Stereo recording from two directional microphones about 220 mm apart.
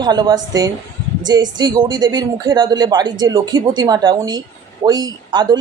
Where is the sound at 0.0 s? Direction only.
20° right (ahead or behind).